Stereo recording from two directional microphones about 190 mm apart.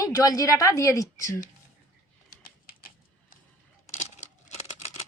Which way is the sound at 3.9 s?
35° left (ahead or behind).